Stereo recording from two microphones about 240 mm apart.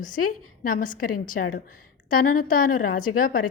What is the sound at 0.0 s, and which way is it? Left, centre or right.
Speech, left.